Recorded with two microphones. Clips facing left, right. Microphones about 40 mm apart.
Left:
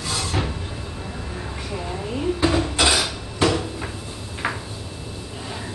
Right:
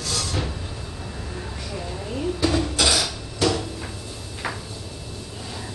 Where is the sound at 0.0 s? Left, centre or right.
Left.